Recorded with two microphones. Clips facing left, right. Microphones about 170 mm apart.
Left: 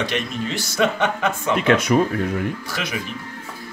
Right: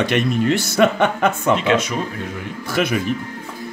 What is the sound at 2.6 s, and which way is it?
Speech, 55° right (ahead or behind).